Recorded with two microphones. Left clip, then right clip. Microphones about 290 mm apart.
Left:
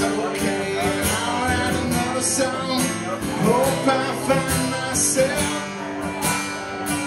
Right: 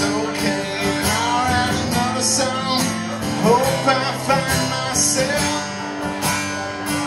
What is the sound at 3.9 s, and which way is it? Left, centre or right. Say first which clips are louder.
Music: right 2 dB; right.